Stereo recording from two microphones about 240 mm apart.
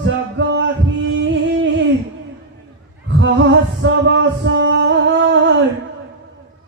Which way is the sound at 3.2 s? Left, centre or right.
Right.